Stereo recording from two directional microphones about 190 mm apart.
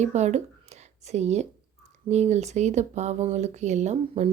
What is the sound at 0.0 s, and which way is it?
A woman's voice, 35° right (ahead or behind).